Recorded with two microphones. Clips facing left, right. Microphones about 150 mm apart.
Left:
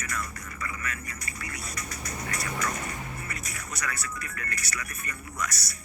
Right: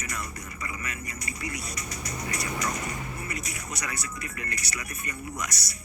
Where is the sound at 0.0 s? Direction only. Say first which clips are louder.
Even; 20° right (ahead or behind).